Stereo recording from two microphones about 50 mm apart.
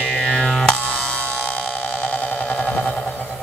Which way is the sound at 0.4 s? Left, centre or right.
Centre.